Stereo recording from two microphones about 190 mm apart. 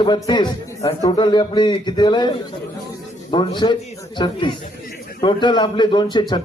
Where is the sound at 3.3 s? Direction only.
25° left (ahead or behind).